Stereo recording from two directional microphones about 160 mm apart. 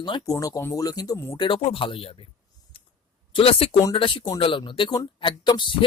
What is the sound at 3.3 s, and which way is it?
Speech, 35° left (ahead or behind).